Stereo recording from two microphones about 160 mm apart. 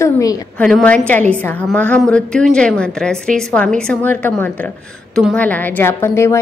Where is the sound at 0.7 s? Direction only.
5° left (ahead or behind).